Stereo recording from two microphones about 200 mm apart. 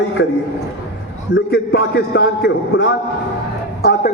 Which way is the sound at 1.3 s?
55° left (ahead or behind).